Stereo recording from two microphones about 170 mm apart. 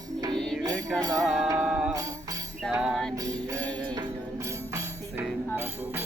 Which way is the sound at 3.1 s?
20° right (ahead or behind).